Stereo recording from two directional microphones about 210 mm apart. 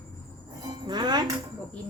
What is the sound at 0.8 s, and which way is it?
Speech, 20° right (ahead or behind).